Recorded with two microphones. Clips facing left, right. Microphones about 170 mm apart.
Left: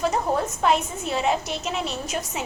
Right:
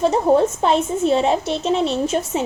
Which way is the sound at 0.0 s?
25° right (ahead or behind).